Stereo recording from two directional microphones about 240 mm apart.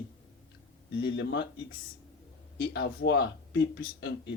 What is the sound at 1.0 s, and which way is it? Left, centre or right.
Speech, left.